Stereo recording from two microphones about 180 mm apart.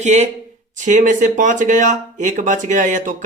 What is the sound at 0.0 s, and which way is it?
Speech, 40° right (ahead or behind).